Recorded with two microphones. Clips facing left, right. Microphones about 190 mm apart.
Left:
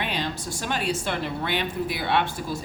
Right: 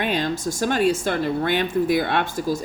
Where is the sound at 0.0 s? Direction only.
45° right (ahead or behind).